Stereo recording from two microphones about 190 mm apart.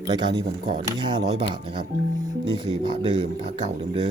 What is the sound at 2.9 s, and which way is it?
Speech, 25° right (ahead or behind).